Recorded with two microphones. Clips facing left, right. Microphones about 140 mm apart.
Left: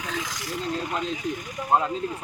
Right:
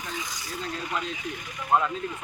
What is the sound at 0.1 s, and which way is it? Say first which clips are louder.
Snake: left 5 dB; 90° left.